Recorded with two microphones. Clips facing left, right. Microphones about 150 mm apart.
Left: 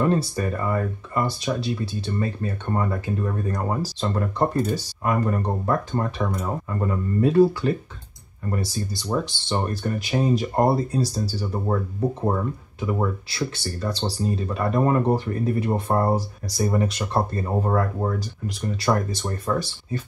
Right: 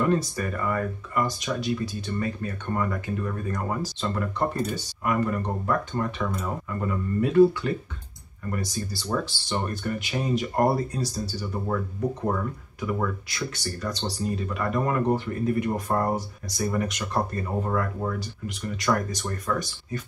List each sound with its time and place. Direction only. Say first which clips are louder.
0.1 s speech: left 2 dB; 30° left (ahead or behind)
8.9 s speech: left 3 dB; 20° left (ahead or behind)
9.8 s speech: left 8 dB; 35° left (ahead or behind)
12.8 s speech: left 3 dB; 30° left (ahead or behind)